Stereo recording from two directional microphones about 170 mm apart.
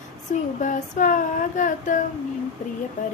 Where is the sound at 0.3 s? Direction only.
50° left (ahead or behind).